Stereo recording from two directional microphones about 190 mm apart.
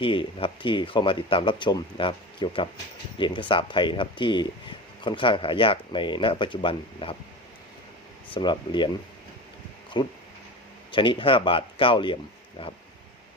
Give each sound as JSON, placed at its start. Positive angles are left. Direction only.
{"t": 0.0, "sound": "speech", "side_deg": 25}
{"t": 8.3, "sound": "speech", "side_deg": 25}
{"t": 10.0, "sound": "speech", "side_deg": 25}